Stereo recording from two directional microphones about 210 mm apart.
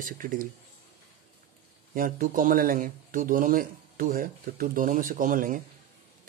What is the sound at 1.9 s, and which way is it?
A man's voice, 40° right (ahead or behind).